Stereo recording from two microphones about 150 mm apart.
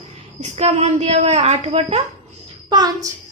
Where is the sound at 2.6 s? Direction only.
25° right (ahead or behind).